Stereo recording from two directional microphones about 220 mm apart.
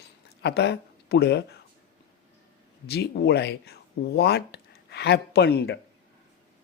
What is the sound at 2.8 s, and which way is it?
Speech, 45° left (ahead or behind).